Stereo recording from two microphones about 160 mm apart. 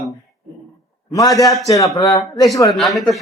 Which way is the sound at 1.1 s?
20° left (ahead or behind).